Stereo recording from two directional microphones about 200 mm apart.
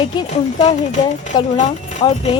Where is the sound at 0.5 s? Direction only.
35° left (ahead or behind).